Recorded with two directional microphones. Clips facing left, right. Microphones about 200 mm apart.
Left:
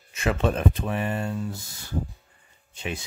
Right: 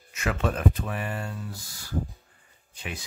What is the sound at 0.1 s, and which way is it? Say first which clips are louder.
Speech: left 4 dB; 25° left (ahead or behind).